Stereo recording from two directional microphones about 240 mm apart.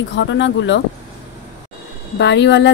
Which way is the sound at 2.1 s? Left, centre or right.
Left.